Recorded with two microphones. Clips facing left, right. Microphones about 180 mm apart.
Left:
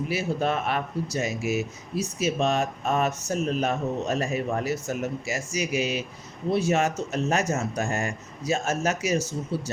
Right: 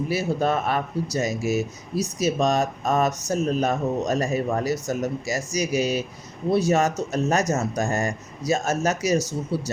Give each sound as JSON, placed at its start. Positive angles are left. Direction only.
{"t": 0.1, "sound": "speech", "side_deg": -40}